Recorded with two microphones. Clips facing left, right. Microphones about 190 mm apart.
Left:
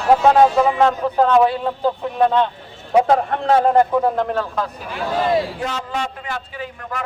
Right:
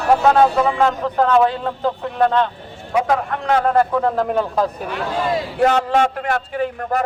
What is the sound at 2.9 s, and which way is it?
Speech, 30° left (ahead or behind).